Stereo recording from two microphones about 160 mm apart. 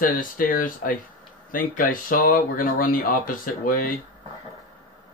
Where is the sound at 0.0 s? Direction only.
55° left (ahead or behind).